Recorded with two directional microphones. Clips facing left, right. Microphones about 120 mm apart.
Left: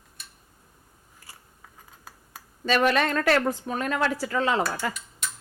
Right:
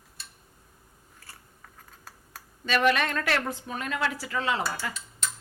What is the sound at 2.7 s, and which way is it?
A woman's voice, 40° left (ahead or behind).